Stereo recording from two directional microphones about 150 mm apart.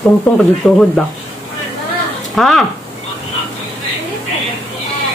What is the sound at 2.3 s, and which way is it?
Speech, centre (ahead or behind).